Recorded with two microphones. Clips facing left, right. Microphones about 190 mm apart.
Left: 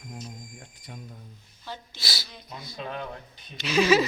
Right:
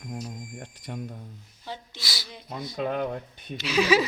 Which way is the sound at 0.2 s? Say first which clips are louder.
Right 5 dB; 70° right (ahead or behind).